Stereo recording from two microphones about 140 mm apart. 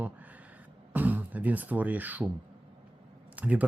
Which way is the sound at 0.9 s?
10° right (ahead or behind).